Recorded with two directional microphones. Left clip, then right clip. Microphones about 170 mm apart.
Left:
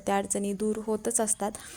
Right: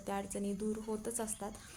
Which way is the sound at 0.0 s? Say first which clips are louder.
Left 11 dB; 45° left (ahead or behind).